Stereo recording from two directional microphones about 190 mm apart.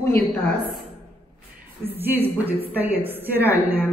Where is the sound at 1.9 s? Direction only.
10° right (ahead or behind).